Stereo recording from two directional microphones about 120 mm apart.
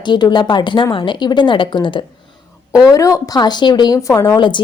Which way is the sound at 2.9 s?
25° left (ahead or behind).